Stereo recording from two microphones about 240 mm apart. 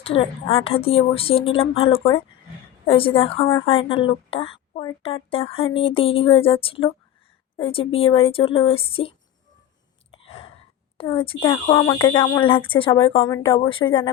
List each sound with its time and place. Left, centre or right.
0.0 s a woman's voice: left
10.1 s whispering: left
10.9 s a woman's voice: left